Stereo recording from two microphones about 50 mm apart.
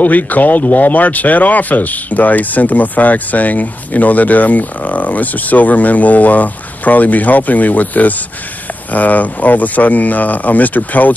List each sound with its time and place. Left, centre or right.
0.0 s speech: left